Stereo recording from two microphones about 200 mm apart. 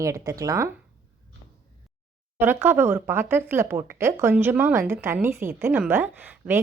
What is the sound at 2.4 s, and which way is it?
A woman's voice, 10° right (ahead or behind).